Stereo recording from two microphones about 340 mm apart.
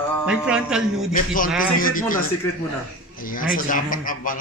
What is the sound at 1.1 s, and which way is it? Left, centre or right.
Speech, left.